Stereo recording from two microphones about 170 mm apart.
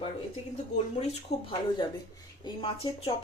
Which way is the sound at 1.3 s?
40° left (ahead or behind).